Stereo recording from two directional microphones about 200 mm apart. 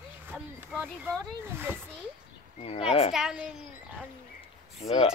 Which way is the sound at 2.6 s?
30° left (ahead or behind).